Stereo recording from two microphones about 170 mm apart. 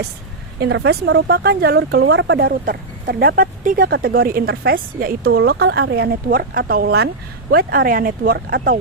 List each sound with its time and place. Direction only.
0.6 s speech: 80° right; by 8.8 s 60° right (ahead or behind)